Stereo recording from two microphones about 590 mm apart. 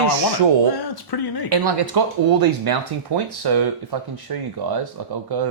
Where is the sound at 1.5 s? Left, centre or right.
Right.